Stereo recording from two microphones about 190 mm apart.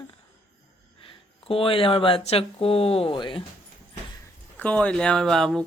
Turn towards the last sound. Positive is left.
turn(degrees=5)  # may be behind; listen again after turning